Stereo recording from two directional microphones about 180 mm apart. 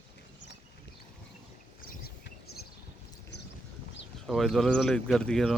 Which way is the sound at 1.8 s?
60° left (ahead or behind).